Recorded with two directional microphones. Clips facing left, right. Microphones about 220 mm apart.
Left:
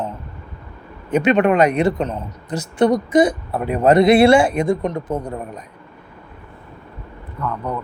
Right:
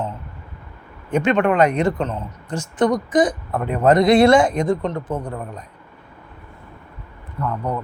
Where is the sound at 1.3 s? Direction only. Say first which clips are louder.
Even; 20° left (ahead or behind).